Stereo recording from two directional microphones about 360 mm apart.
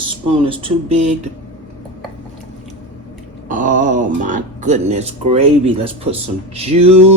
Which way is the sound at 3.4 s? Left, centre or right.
Right.